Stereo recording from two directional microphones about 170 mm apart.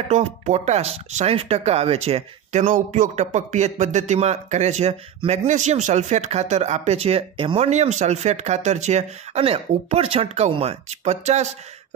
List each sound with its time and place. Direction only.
0.1 s speech: 40° right (ahead or behind)